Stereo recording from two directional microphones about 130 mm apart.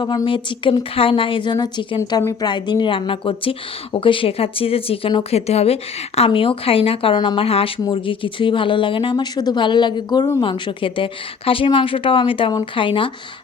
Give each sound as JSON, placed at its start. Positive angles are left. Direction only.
{"t": 0.0, "sound": "speech", "side_deg": 35}
{"t": 10.4, "sound": "speech", "side_deg": 40}